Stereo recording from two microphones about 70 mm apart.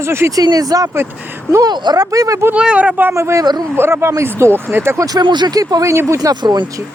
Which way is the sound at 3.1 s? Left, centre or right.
Right.